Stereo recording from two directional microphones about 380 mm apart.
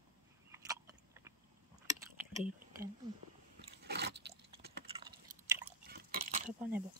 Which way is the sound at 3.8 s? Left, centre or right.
Right.